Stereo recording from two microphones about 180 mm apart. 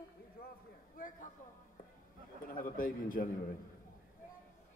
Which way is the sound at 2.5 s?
50° left (ahead or behind).